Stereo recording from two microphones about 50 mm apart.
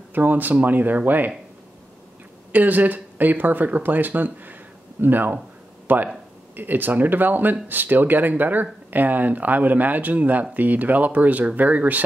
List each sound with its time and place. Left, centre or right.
0.1 s speech: right
2.5 s speech: right